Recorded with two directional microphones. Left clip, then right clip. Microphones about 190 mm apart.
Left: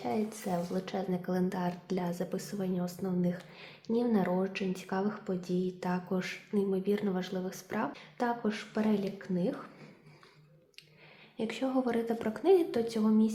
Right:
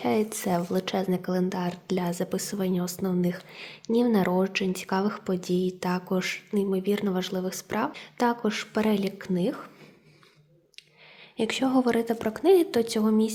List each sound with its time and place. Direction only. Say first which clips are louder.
0.0 s speech: right 8 dB; 45° right (ahead or behind)
11.3 s speech: right 8 dB; 40° right (ahead or behind)